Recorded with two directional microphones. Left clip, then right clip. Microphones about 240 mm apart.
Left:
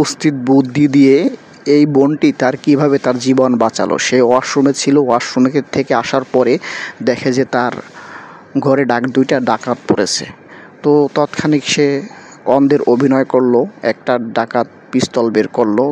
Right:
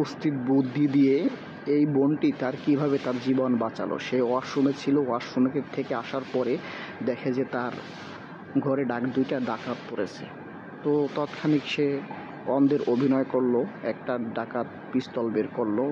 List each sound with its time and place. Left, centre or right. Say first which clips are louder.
0.0 s speech: left 13 dB; left